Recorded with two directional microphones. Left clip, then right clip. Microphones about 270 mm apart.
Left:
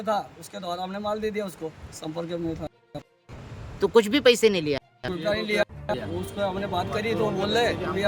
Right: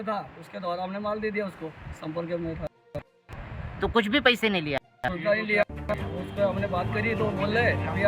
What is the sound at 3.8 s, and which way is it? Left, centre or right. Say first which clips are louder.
Speech: left 3 dB; centre.